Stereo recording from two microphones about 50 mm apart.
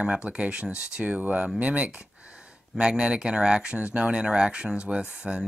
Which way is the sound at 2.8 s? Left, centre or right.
Centre.